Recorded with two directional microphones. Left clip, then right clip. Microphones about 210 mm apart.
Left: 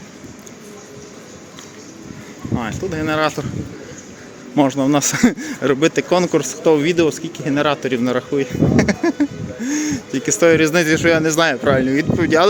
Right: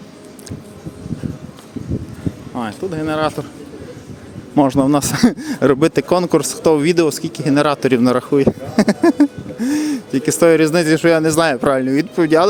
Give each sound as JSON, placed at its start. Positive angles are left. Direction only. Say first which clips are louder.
{"t": 2.6, "sound": "speech", "louder": "even", "side_deg": -10}
{"t": 4.5, "sound": "speech", "louder": "right 2 dB", "side_deg": -25}
{"t": 11.6, "sound": "speech", "louder": "even", "side_deg": -35}
{"t": 12.1, "sound": "speech", "louder": "right 2 dB", "side_deg": -20}